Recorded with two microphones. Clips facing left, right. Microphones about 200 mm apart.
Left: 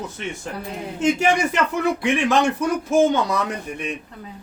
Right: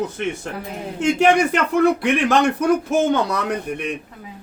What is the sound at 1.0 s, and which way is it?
Speech, 60° right (ahead or behind).